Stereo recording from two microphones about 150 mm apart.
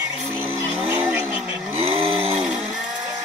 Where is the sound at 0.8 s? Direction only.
15° right (ahead or behind).